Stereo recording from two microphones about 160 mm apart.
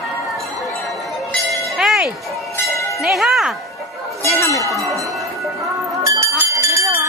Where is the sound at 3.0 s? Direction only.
Centre (ahead or behind).